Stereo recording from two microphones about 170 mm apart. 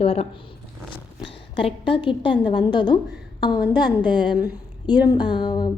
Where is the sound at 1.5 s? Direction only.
30° left (ahead or behind).